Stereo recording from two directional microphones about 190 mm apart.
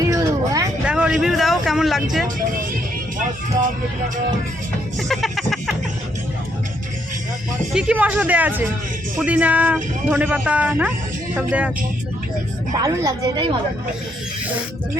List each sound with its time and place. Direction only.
0.1 s a sound: 15° right (ahead or behind)
0.9 s a sound: 5° right (ahead or behind)
2.2 s speech: 45° right (ahead or behind)
4.9 s music: centre (ahead or behind)
7.7 s speech: 5° right (ahead or behind)
12.8 s a woman's voice: 20° right (ahead or behind)